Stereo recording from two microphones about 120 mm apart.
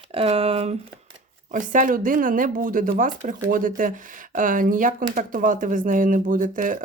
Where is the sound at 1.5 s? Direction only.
90° right.